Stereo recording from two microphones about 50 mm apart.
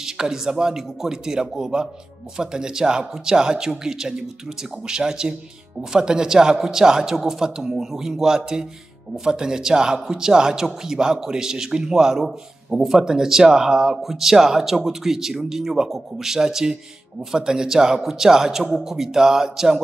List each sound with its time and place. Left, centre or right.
0.0 s speech: centre